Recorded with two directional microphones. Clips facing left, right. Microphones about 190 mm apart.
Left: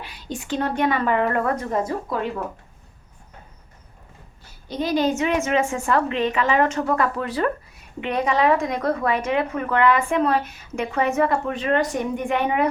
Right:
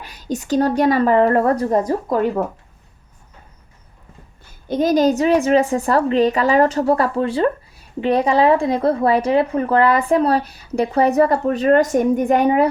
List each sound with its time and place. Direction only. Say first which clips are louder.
0.0 s a woman's voice: right 7 dB; 45° right (ahead or behind)
4.7 s a woman's voice: right 6 dB; 45° right (ahead or behind)